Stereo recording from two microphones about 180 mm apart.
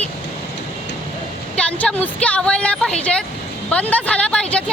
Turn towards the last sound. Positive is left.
turn(degrees=5)  # may be behind; listen again after turning